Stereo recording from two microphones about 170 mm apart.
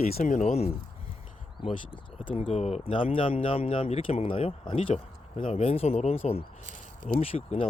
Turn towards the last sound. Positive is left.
turn(degrees=35)  # may be behind; listen again after turning